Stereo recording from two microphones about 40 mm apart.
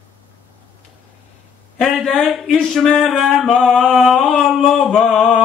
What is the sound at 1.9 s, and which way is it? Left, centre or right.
Speech, centre.